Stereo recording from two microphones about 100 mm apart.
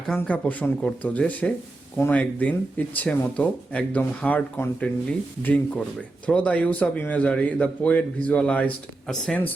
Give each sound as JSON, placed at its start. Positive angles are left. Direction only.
{"t": 0.2, "sound": "a man's voice", "side_deg": 15}